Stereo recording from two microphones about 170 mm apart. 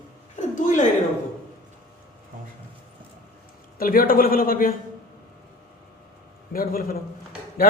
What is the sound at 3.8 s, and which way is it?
Speech, 55° left (ahead or behind).